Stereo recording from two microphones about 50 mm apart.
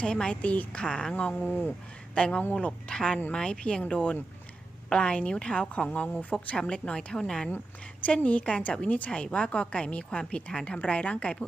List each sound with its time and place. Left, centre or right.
0.0 s a woman's voice: centre
1.5 s speech: left
2.1 s a woman's voice: left
6.6 s a woman's voice: centre
8.0 s a woman's voice: left